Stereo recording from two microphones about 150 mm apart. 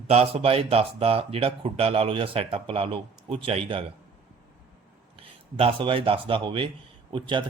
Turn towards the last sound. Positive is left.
turn(degrees=-30)  # may be behind; listen again after turning